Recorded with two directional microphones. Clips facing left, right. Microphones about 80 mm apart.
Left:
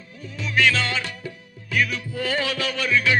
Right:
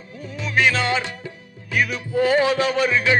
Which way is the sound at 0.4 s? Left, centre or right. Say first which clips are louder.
Right 2 dB; right.